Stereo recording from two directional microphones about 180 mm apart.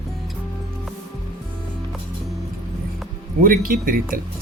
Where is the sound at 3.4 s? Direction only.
55° right (ahead or behind).